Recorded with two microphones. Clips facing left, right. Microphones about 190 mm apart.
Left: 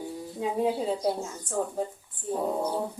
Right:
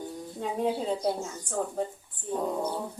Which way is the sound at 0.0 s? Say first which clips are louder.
Left 3 dB; 5° left (ahead or behind).